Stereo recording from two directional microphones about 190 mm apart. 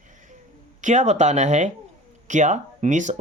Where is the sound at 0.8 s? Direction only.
35° right (ahead or behind).